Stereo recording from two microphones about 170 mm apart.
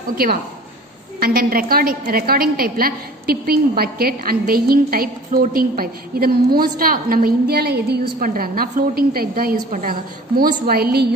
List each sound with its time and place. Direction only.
1.2 s a woman's voice: 60° right (ahead or behind)
8.2 s a woman's voice: 55° right (ahead or behind)